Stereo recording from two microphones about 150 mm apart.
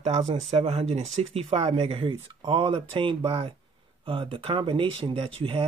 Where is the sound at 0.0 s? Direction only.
45° right (ahead or behind).